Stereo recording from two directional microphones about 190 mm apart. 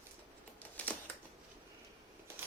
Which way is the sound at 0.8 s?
10° left (ahead or behind).